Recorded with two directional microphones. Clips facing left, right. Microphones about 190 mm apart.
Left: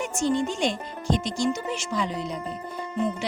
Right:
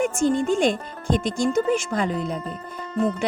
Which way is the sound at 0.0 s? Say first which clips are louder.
Right 4 dB; 50° right (ahead or behind).